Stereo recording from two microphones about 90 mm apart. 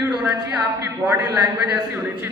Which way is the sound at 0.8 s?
25° right (ahead or behind).